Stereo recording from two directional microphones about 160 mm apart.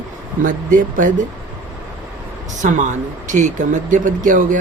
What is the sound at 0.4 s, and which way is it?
Speech, 55° right (ahead or behind).